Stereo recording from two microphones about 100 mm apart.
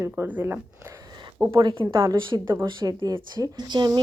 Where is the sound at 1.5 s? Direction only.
55° right (ahead or behind).